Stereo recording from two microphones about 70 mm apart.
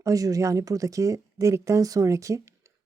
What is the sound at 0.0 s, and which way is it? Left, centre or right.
Speech, right.